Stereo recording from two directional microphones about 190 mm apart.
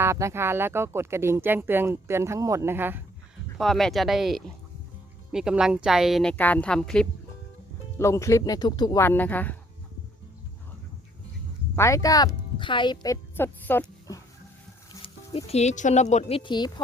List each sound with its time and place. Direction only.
0.0 s speech: 15° right (ahead or behind)
3.6 s a woman's voice: centre (ahead or behind)
7.9 s speech: 15° left (ahead or behind)
9.0 s a woman's voice: 10° left (ahead or behind)
11.8 s speech: 15° left (ahead or behind)
15.0 s speech: 30° left (ahead or behind)
16.4 s speech: 25° left (ahead or behind)